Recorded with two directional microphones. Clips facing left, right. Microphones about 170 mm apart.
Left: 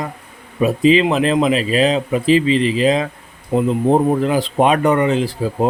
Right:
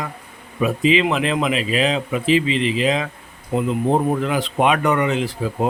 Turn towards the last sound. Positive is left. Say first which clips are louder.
# left 3 dB
turn(degrees=35)  # may be behind; listen again after turning